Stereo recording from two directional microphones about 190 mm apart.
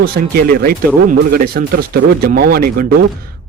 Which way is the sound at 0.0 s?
50° right (ahead or behind).